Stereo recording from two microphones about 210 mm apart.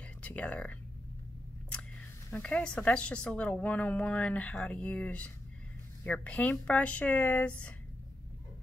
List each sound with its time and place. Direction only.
0.0 s speech: 5° left (ahead or behind)
2.3 s a woman's voice: 5° left (ahead or behind)